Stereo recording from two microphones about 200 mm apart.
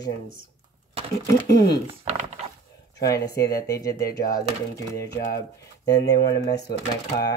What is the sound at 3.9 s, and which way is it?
Speech, 50° left (ahead or behind).